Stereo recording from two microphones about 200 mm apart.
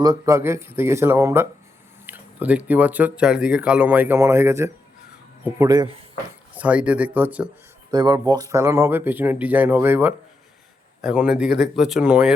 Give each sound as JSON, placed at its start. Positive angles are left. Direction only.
{"t": 0.0, "sound": "speech", "side_deg": -15}
{"t": 6.5, "sound": "speech", "side_deg": -5}
{"t": 7.9, "sound": "speech", "side_deg": -20}